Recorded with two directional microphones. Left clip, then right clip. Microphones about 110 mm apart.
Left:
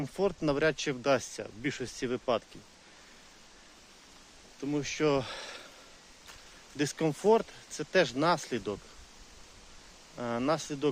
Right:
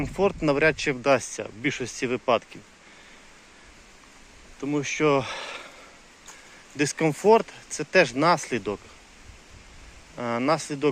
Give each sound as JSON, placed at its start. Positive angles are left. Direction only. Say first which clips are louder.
{"t": 0.0, "sound": "speech", "louder": "right 7 dB", "side_deg": 20}
{"t": 4.6, "sound": "speech", "louder": "right 6 dB", "side_deg": 30}
{"t": 6.7, "sound": "speech", "louder": "right 7 dB", "side_deg": 25}
{"t": 10.2, "sound": "speech", "louder": "right 6 dB", "side_deg": 30}